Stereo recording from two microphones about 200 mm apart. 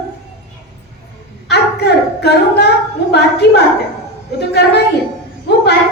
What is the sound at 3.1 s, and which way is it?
A woman's voice, 55° left (ahead or behind).